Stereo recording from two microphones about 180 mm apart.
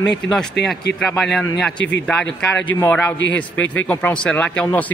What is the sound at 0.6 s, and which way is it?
Speech, 70° left (ahead or behind).